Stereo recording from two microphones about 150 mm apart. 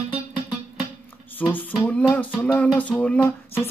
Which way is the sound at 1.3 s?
10° left (ahead or behind).